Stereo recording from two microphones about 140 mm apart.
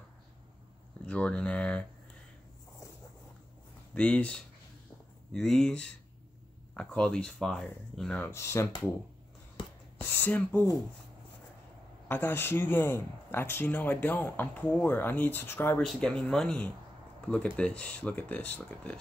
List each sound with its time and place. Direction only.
1.0 s speech: 10° left (ahead or behind)
3.9 s speech: 10° left (ahead or behind)
8.2 s speech: 20° left (ahead or behind)
10.1 s speech: 15° left (ahead or behind)
12.1 s speech: 15° left (ahead or behind)
15.8 s speech: centre (ahead or behind)